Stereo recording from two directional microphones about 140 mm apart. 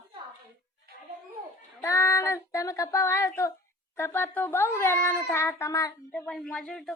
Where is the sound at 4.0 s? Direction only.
15° left (ahead or behind).